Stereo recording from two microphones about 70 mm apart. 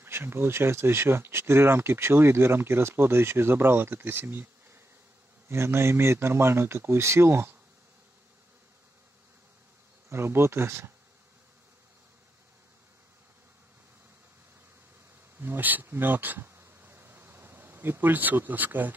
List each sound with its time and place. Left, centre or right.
0.0 s speech: right
10.0 s speech: right
15.3 s a sound: right